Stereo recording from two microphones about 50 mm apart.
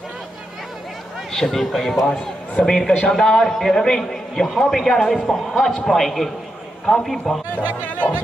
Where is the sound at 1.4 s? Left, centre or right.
Centre.